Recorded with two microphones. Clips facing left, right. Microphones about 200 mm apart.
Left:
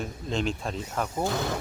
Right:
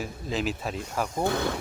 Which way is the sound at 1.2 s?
60° right (ahead or behind).